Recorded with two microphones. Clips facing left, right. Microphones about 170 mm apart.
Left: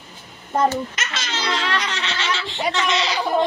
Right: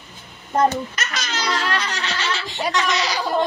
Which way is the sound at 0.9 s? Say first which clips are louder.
Right 1 dB; 25° left (ahead or behind).